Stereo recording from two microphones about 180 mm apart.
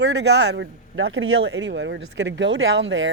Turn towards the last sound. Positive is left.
turn(degrees=-90)